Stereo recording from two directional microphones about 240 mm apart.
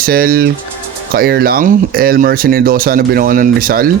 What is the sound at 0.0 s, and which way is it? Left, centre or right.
Speech, right.